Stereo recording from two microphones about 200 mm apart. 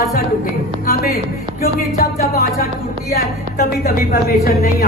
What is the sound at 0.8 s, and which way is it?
A woman's voice, 45° left (ahead or behind).